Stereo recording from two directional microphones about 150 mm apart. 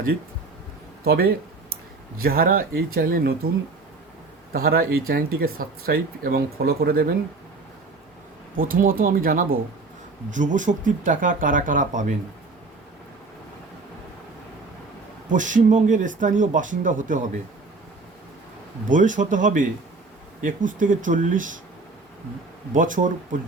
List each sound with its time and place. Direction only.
1.0 s speech: 90° right
2.1 s speech: 80° right
4.5 s speech: 90° right
8.5 s speech: 70° right (ahead or behind)
10.2 s speech: 55° right (ahead or behind)
15.3 s speech: 60° right (ahead or behind)
18.9 s speech: 60° right (ahead or behind)
22.7 s speech: 60° right (ahead or behind)